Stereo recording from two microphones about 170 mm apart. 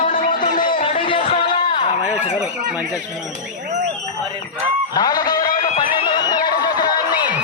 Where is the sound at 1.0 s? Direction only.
30° left (ahead or behind).